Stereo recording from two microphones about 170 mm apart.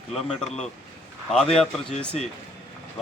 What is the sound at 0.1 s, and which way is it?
Speech, 5° left (ahead or behind).